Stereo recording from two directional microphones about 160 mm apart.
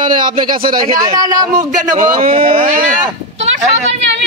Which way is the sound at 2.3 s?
35° right (ahead or behind).